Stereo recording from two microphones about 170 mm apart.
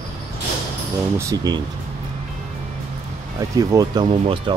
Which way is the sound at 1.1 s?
20° right (ahead or behind).